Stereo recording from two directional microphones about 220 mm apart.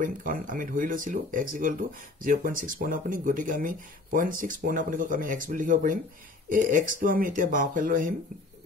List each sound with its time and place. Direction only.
0.0 s speech: 35° right (ahead or behind)